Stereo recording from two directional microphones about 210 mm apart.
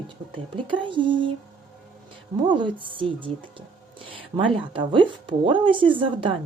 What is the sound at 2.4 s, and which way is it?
A woman's voice, 25° right (ahead or behind).